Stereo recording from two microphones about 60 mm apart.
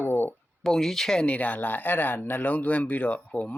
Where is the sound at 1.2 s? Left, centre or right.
Left.